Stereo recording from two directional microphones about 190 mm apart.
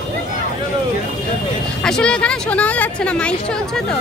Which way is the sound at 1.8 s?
5° left (ahead or behind).